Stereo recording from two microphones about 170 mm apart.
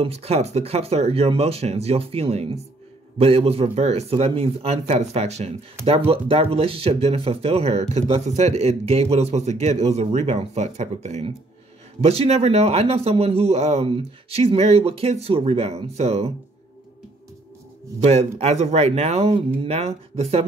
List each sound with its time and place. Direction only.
0.0 s speech: 35° right (ahead or behind)
18.4 s speech: 40° right (ahead or behind)